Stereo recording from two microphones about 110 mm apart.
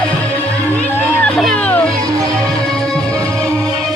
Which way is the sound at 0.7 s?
15° left (ahead or behind).